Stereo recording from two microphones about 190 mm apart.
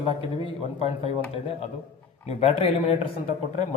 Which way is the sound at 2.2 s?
35° left (ahead or behind).